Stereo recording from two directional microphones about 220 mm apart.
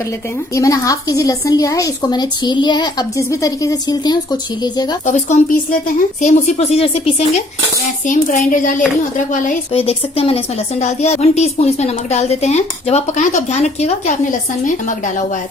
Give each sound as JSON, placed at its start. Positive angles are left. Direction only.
{"t": 0.5, "sound": "a woman's voice", "side_deg": 15}
{"t": 5.0, "sound": "a woman's voice", "side_deg": 35}